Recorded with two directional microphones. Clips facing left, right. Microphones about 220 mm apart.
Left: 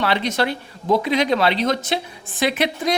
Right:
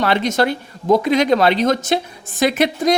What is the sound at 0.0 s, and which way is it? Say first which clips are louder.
Speech: right 4 dB; 45° right (ahead or behind).